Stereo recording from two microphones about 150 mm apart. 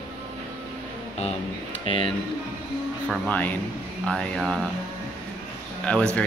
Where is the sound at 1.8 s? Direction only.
35° left (ahead or behind).